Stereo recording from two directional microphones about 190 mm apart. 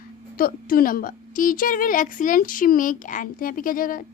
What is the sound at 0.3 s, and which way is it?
A woman's voice, 50° left (ahead or behind).